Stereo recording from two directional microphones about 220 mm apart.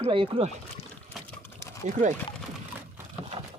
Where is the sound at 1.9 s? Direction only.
35° right (ahead or behind).